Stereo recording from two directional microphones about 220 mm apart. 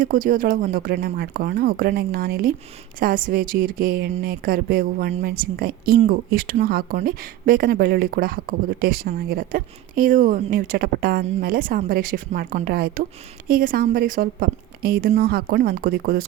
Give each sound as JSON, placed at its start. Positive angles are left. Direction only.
{"t": 0.0, "sound": "speech", "side_deg": -35}